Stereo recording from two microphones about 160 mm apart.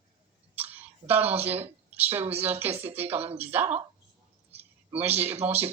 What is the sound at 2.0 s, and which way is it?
Speech, 10° right (ahead or behind).